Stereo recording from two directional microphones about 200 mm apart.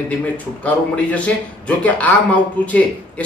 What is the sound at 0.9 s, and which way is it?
A man's voice, 5° left (ahead or behind).